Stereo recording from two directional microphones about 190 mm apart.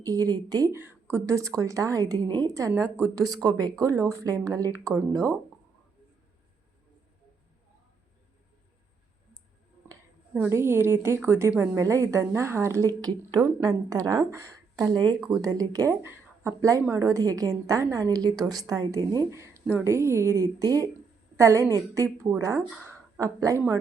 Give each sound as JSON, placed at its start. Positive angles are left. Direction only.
{"t": 0.0, "sound": "a woman's voice", "side_deg": -20}
{"t": 9.9, "sound": "a woman's voice", "side_deg": -10}